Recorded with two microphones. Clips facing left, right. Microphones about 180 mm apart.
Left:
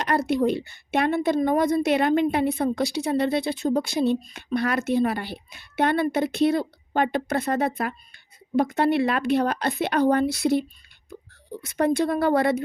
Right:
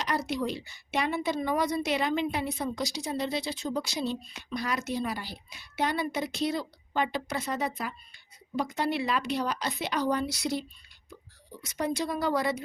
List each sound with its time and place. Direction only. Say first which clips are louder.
0.0 s speech: left 8 dB; 55° left (ahead or behind)